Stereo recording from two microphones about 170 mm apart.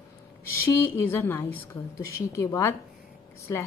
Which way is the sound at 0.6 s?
15° left (ahead or behind).